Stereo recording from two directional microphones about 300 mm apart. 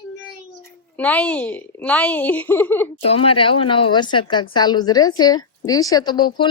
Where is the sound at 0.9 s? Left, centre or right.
Centre.